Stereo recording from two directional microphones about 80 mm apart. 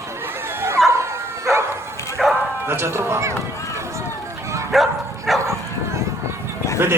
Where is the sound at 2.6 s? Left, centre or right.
Right.